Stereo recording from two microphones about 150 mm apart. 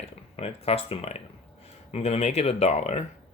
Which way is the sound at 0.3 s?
40° left (ahead or behind).